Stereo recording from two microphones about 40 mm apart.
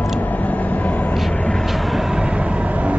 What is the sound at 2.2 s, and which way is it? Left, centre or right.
Vehicle, right.